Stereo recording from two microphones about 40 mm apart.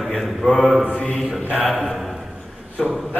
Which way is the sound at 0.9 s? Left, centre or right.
Left.